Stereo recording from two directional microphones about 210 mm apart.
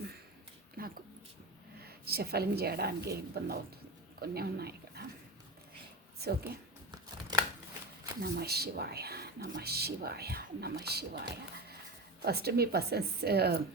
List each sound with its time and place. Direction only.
0.8 s a sound: 45° right (ahead or behind)
1.8 s speech: 50° right (ahead or behind)
6.1 s speech: 50° right (ahead or behind)
7.3 s chopping: 20° right (ahead or behind)
8.2 s speech: 50° right (ahead or behind)
12.2 s speech: 50° right (ahead or behind)